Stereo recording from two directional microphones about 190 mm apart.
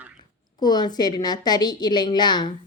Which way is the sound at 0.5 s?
20° left (ahead or behind).